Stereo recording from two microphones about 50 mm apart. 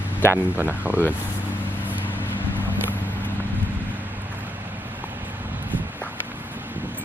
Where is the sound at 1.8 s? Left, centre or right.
Right.